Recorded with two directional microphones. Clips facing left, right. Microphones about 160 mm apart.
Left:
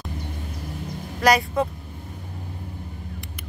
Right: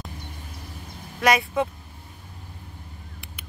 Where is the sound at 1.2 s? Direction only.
Centre (ahead or behind).